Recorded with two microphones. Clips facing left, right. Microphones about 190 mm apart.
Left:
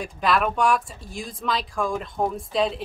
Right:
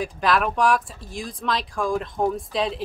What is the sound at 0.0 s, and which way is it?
Speech, centre (ahead or behind).